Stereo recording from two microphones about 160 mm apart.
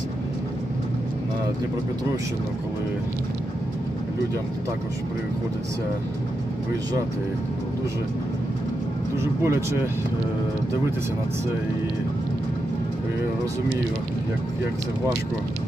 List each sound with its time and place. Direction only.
9.4 s speech: 15° right (ahead or behind)